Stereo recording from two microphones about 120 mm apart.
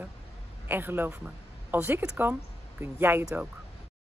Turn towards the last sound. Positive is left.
turn(degrees=-20)  # may be behind; listen again after turning